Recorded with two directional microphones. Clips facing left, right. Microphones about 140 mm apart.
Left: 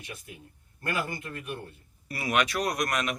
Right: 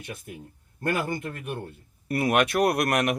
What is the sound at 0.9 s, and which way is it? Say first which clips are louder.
Speech: right 4 dB; 60° right (ahead or behind).